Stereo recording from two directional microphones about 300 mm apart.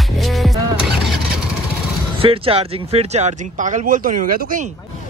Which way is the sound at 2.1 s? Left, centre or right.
Centre.